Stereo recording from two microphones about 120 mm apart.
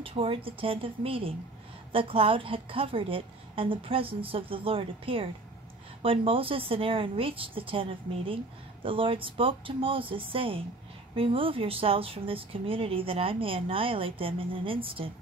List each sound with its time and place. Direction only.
0.0 s a woman's voice: 50° right (ahead or behind)